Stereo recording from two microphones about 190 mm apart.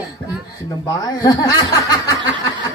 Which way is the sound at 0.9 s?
20° left (ahead or behind).